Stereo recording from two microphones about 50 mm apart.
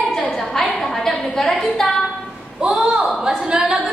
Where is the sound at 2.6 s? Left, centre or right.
Centre.